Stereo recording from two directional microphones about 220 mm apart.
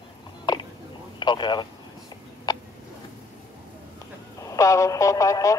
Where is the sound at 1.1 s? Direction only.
20° left (ahead or behind).